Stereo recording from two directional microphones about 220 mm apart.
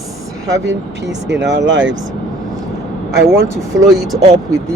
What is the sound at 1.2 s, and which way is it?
Speech, 55° right (ahead or behind).